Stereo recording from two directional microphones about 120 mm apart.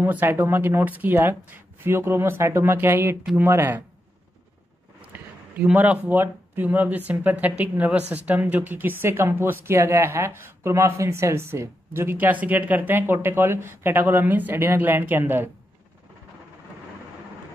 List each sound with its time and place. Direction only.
0.0 s speech: 15° right (ahead or behind)
5.0 s a woman's voice: 10° right (ahead or behind)